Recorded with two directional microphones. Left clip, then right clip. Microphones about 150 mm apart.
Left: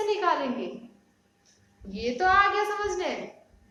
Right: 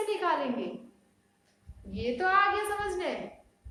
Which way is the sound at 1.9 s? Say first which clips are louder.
Left 4 dB; 5° right (ahead or behind).